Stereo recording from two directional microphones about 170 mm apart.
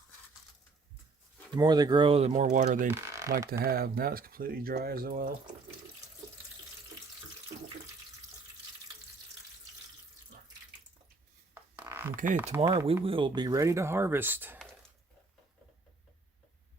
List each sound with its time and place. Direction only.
1.5 s speech: 25° right (ahead or behind); by 2.8 s 45° right (ahead or behind)
2.8 s speech: 15° right (ahead or behind)
3.6 s speech: 65° right (ahead or behind)
11.8 s a sound: 10° right (ahead or behind)
12.1 s speech: 50° right (ahead or behind)
12.5 s speech: 20° right (ahead or behind)